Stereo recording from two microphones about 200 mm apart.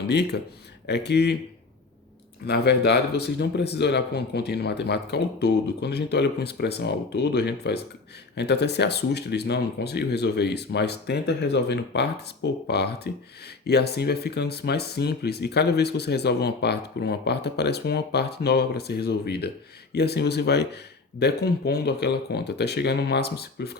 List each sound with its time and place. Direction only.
0.1 s speech: 55° left (ahead or behind)
2.5 s speech: 55° left (ahead or behind)